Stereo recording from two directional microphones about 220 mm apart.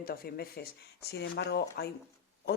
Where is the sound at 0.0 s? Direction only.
45° left (ahead or behind).